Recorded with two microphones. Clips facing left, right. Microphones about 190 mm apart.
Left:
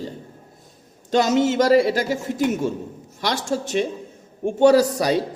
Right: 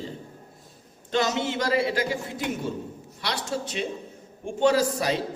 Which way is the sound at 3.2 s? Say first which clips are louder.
Left 6 dB; 45° left (ahead or behind).